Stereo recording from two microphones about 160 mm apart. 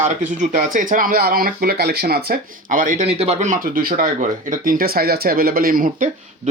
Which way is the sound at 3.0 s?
40° right (ahead or behind).